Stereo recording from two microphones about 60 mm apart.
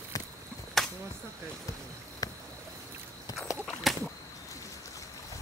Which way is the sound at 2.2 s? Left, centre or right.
Left.